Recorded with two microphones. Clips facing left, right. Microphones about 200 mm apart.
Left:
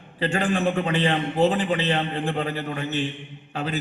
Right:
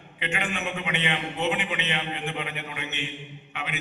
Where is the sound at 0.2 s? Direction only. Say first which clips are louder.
Left 8 dB; 35° left (ahead or behind).